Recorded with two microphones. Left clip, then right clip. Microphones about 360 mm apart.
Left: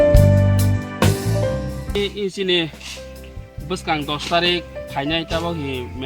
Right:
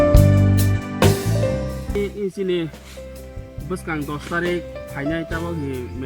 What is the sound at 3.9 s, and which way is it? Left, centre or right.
Speech, centre.